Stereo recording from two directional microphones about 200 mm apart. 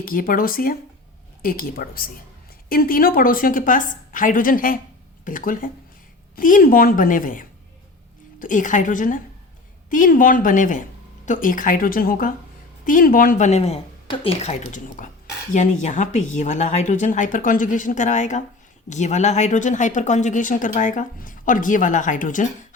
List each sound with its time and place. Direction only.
0.0 s a woman's voice: 45° left (ahead or behind)